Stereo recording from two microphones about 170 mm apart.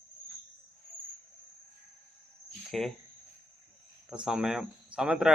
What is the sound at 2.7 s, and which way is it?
Speech, centre (ahead or behind).